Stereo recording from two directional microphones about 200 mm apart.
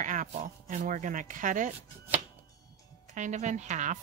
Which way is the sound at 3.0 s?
35° right (ahead or behind).